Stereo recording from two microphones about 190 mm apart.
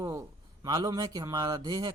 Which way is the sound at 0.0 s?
15° right (ahead or behind).